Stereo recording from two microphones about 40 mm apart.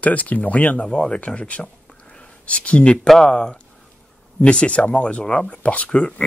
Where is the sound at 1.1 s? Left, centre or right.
Left.